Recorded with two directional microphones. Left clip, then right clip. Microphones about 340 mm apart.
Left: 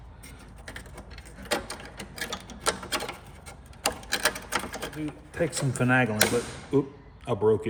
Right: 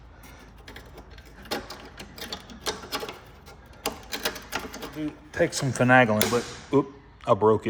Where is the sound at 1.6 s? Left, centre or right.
Right.